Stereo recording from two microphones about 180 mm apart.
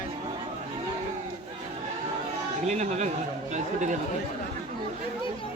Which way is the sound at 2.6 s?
40° right (ahead or behind).